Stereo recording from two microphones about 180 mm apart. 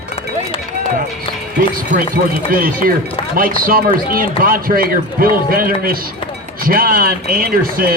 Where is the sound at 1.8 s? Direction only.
50° right (ahead or behind).